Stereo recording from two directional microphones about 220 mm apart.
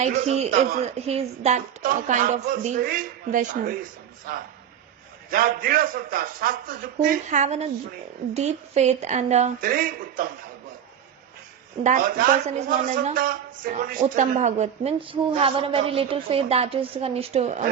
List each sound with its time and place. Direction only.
0.0 s a woman's voice: 30° right (ahead or behind)
11.8 s a woman's voice: 35° right (ahead or behind)